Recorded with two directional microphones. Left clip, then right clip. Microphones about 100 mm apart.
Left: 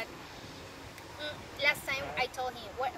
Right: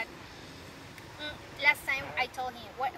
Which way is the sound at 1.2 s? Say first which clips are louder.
Even; 35° left (ahead or behind).